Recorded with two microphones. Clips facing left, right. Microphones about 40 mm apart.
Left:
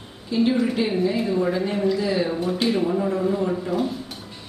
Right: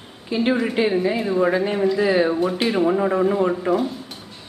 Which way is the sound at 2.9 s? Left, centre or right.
Right.